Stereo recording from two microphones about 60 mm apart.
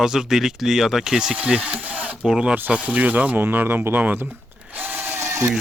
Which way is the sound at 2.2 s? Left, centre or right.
Centre.